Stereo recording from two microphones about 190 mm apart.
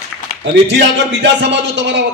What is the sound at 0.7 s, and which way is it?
A man's voice, 70° right (ahead or behind).